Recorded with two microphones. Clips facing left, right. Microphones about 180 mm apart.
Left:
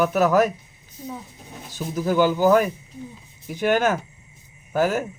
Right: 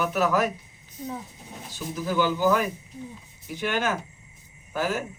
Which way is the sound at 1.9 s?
45° left (ahead or behind).